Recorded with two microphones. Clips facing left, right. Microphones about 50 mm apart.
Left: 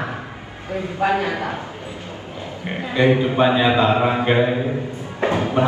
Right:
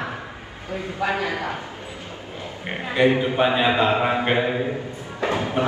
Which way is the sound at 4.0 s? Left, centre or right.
Centre.